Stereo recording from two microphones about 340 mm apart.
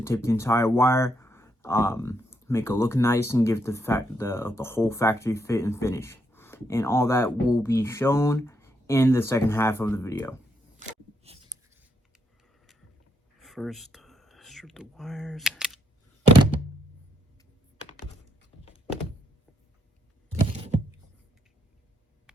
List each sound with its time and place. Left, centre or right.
0.0 s speech: centre
10.8 s a sound: centre
13.4 s whispering: centre